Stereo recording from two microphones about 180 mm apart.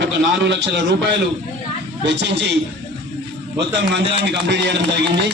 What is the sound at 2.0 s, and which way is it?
Speech, 75° right (ahead or behind).